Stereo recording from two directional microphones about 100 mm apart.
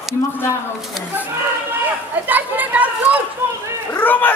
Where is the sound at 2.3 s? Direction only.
15° right (ahead or behind).